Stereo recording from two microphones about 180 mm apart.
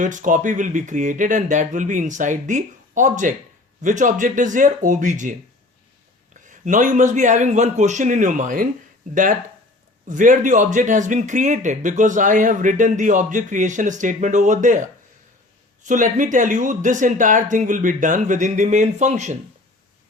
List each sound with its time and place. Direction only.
0.0 s speech: 45° right (ahead or behind)
10.1 s speech: 45° right (ahead or behind)